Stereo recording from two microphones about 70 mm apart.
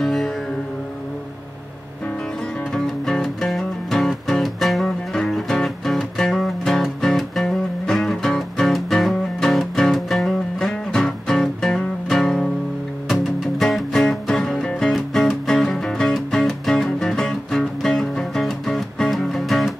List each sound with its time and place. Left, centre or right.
0.0 s music: centre
2.7 s music: centre